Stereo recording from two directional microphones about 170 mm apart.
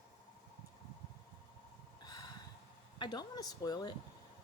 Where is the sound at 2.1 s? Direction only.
25° left (ahead or behind).